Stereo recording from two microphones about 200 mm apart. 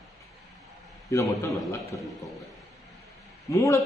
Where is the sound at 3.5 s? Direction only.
15° left (ahead or behind).